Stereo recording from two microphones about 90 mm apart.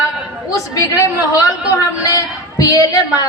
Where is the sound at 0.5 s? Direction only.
35° left (ahead or behind).